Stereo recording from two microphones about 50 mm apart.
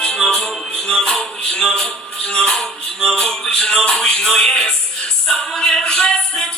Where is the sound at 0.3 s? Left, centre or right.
Centre.